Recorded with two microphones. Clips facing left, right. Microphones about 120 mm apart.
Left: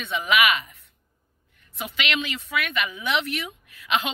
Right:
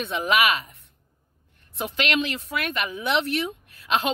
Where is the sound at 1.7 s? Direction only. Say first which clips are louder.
Right 3 dB; 40° right (ahead or behind).